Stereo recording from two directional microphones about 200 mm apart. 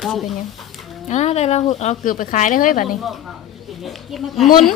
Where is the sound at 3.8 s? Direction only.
Centre (ahead or behind).